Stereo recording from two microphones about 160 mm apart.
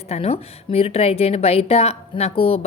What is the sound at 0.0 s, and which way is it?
A woman's voice, 40° left (ahead or behind).